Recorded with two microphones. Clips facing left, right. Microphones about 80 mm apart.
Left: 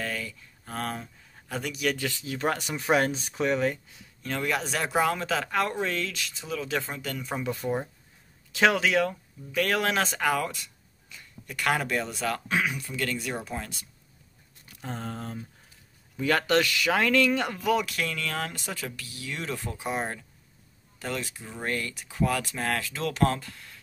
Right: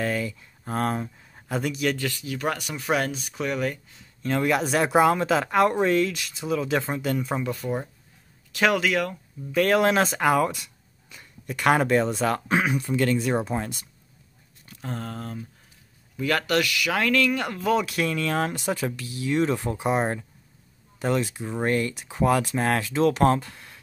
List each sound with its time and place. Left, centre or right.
0.0 s speech: centre
1.5 s speech: centre
2.0 s speech: centre
4.4 s speech: centre
7.2 s speech: centre
8.5 s speech: centre
9.5 s speech: centre; by 13.7 s right
14.9 s speech: centre; by 16.9 s left
16.9 s speech: centre
17.8 s speech: centre